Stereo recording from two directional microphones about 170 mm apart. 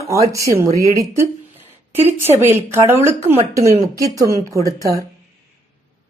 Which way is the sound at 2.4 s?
15° right (ahead or behind).